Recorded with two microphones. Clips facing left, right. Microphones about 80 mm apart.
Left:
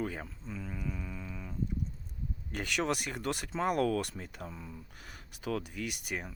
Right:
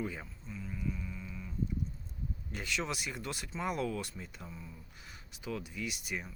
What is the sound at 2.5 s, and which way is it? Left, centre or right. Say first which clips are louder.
Speech: left 5 dB; left.